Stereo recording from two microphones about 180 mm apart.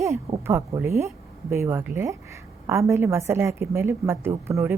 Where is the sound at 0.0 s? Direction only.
15° right (ahead or behind).